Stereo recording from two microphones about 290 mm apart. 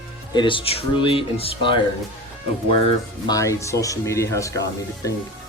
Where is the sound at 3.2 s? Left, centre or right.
Centre.